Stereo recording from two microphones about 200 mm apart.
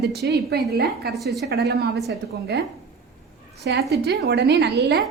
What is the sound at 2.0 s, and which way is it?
Speech, 55° right (ahead or behind).